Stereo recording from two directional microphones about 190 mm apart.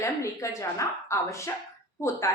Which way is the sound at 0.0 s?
15° left (ahead or behind).